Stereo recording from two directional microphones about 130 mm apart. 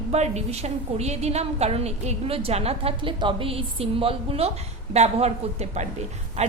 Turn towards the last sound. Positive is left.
turn(degrees=-60)  # may be behind; listen again after turning